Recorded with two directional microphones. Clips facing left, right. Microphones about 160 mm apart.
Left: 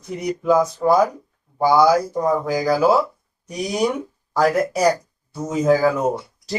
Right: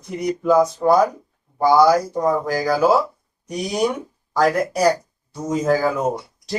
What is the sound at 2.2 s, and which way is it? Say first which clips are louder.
Speech: even; centre (ahead or behind).